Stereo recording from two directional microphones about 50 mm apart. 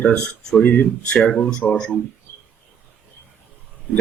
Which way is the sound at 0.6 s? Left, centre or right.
Left.